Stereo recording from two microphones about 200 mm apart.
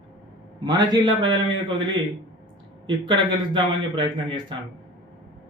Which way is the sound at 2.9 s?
25° right (ahead or behind).